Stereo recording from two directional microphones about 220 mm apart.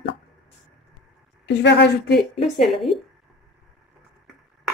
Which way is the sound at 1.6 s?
50° left (ahead or behind).